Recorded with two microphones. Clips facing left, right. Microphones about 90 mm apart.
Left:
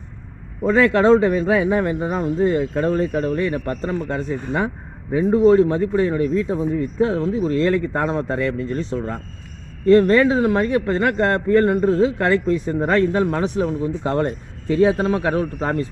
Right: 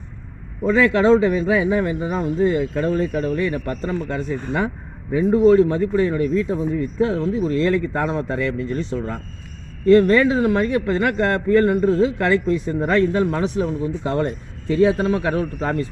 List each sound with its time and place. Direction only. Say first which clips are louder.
0.7 s a man's voice: left 1 dB; 45° left (ahead or behind)